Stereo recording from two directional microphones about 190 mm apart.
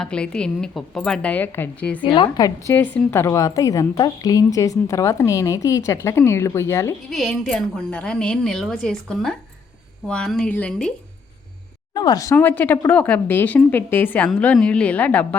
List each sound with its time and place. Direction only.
0.0 s a woman's voice: 5° left (ahead or behind)
2.0 s a woman's voice: 25° left (ahead or behind)
7.1 s a woman's voice: centre (ahead or behind)
11.9 s a woman's voice: 20° left (ahead or behind)